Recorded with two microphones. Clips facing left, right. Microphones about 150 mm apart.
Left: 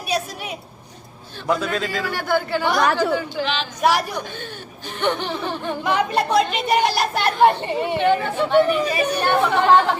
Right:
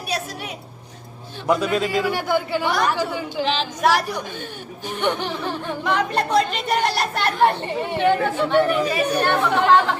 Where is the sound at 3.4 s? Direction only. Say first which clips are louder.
Right 2 dB; 35° right (ahead or behind).